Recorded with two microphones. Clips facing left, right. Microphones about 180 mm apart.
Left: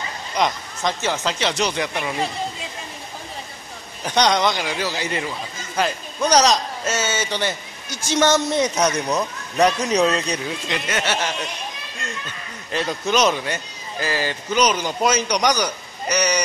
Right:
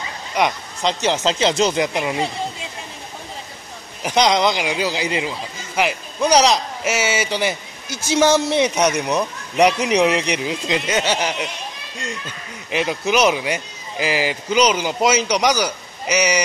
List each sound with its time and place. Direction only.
0.4 s speech: 20° right (ahead or behind)
4.0 s a man's voice: 10° right (ahead or behind)
12.7 s speech: 10° right (ahead or behind)